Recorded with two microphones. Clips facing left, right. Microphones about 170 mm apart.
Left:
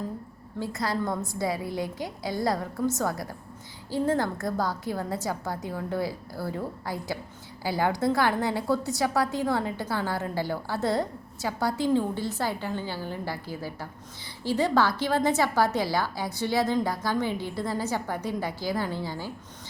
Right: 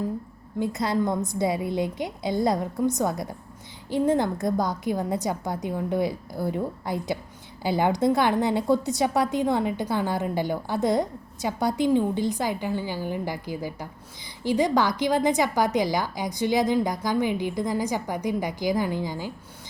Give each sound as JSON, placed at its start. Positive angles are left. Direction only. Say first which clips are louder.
{"t": 0.6, "sound": "a woman's voice", "louder": "right 5 dB", "side_deg": -20}